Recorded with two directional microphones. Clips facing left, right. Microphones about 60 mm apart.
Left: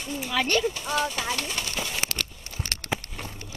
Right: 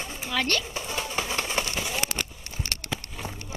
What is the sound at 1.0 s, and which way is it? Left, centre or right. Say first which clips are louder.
Speech: even; right.